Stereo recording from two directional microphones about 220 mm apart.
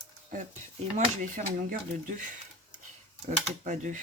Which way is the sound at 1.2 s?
40° right (ahead or behind).